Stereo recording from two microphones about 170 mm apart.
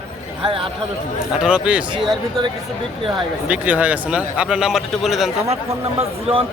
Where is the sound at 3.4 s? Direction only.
10° right (ahead or behind).